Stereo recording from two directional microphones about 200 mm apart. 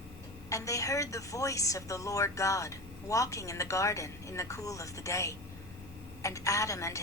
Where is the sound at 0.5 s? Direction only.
15° left (ahead or behind).